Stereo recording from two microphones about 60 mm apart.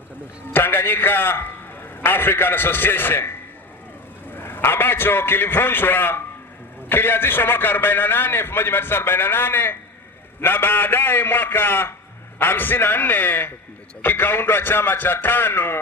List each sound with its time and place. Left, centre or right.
0.5 s a man's voice: left